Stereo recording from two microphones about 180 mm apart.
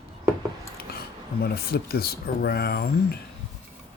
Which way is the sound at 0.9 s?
60° left (ahead or behind).